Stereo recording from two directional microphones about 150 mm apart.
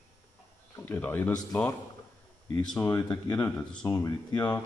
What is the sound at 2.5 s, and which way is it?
Speech, 5° left (ahead or behind).